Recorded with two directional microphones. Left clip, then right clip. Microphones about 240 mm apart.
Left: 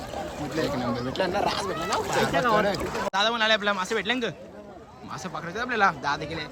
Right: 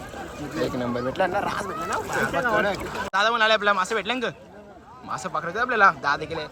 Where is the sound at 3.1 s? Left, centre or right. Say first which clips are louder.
Right 4 dB; centre.